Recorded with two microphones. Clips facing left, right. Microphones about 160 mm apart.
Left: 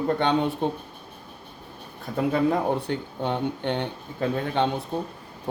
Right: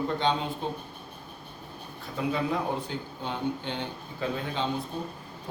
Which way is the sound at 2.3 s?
60° left (ahead or behind).